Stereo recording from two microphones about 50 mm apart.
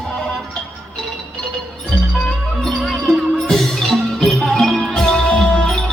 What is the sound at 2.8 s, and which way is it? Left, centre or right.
Music, centre.